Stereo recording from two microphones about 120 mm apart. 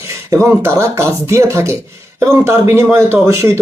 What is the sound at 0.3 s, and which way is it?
Speech, 25° right (ahead or behind).